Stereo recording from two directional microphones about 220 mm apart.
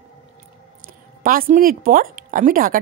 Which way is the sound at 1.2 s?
40° right (ahead or behind).